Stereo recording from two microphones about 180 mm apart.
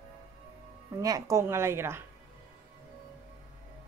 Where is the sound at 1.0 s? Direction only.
20° right (ahead or behind).